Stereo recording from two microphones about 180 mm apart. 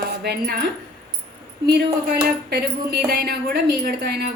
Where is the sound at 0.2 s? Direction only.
60° right (ahead or behind).